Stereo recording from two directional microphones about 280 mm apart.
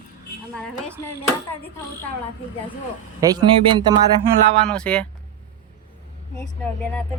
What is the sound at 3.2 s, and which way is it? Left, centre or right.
Speech, centre.